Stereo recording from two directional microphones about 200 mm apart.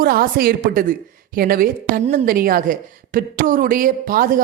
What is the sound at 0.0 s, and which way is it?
A woman's voice, 45° right (ahead or behind).